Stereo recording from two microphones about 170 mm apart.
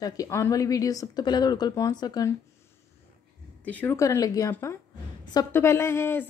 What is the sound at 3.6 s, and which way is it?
Speech, 10° left (ahead or behind).